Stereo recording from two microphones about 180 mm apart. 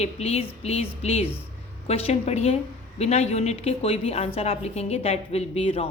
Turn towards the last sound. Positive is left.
turn(degrees=35)  # may be behind; listen again after turning